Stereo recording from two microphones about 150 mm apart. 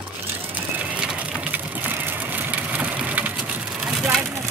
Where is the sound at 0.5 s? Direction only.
10° right (ahead or behind).